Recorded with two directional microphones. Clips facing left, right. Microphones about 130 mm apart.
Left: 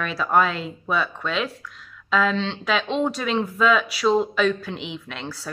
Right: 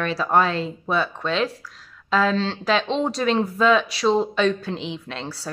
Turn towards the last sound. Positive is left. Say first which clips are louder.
# right 2 dB
turn(degrees=-30)  # may be behind; listen again after turning